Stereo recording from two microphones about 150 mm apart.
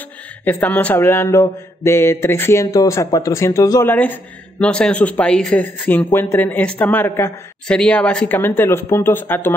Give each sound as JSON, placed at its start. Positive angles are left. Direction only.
{"t": 0.5, "sound": "speech", "side_deg": 10}
{"t": 4.6, "sound": "speech", "side_deg": 5}
{"t": 7.6, "sound": "speech", "side_deg": 5}